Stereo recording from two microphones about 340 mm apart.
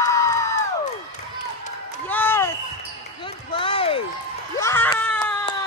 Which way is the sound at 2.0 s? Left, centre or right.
Centre.